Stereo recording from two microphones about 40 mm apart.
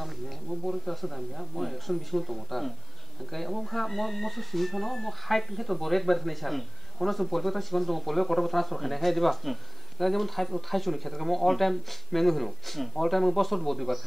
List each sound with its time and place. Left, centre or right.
0.7 s speech: centre